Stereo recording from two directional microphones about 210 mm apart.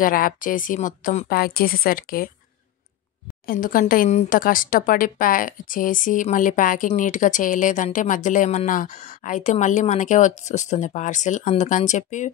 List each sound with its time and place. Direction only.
0.0 s speech: 40° left (ahead or behind)
3.4 s speech: 40° left (ahead or behind)